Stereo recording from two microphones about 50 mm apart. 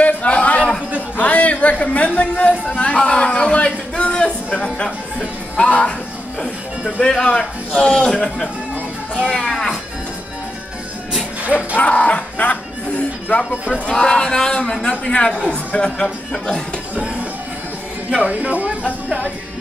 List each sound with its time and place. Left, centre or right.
0.0 s a sound: left
5.7 s music: left
7.0 s a man's voice: centre
9.3 s music: centre
11.5 s music: left
13.5 s speech: centre
13.8 s a man's voice: centre
16.9 s music: right
18.1 s speech: right